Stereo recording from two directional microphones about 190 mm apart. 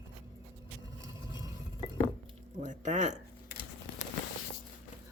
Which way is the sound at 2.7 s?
40° right (ahead or behind).